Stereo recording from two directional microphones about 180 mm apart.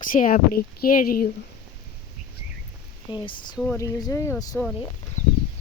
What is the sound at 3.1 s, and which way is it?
Speech, 25° left (ahead or behind).